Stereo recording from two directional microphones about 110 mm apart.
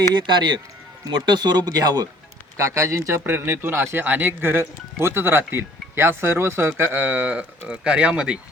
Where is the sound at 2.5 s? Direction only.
30° right (ahead or behind).